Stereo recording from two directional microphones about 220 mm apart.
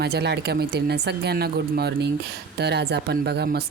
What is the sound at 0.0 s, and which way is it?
Speech, 50° right (ahead or behind).